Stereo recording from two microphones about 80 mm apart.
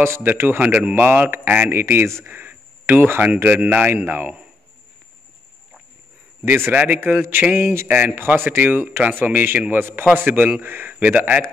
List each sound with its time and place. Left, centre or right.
0.0 s speech: right
6.7 s speech: right